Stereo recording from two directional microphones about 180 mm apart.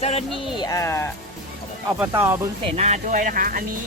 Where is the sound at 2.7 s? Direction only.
40° right (ahead or behind).